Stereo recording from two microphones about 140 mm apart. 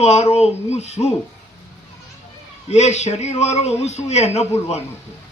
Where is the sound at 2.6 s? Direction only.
55° left (ahead or behind).